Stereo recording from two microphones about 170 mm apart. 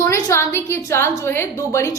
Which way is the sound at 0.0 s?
15° left (ahead or behind).